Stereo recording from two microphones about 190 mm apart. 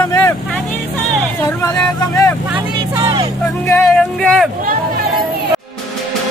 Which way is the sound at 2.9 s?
25° right (ahead or behind).